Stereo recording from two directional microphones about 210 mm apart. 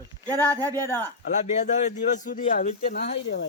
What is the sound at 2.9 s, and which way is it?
Speech, 50° left (ahead or behind).